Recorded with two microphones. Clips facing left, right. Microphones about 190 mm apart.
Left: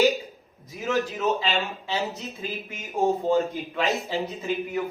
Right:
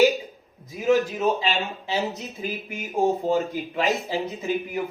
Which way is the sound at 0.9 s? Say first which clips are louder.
Right 2 dB; 15° right (ahead or behind).